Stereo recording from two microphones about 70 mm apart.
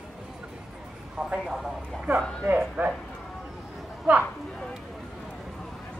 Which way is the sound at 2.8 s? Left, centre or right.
Right.